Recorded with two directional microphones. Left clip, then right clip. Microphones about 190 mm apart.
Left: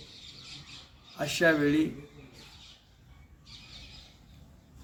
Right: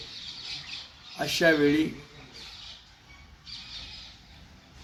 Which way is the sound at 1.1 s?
25° left (ahead or behind).